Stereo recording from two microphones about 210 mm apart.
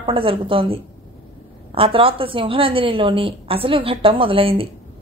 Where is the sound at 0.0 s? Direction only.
25° right (ahead or behind).